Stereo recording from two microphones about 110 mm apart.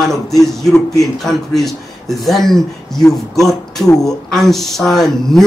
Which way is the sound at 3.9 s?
35° left (ahead or behind).